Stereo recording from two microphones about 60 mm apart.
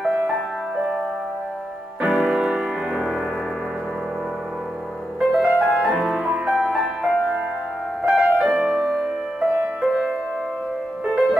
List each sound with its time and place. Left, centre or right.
2.0 s keyboard: centre
5.2 s music: centre